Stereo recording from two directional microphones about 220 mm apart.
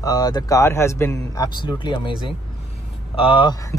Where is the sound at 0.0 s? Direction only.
15° left (ahead or behind).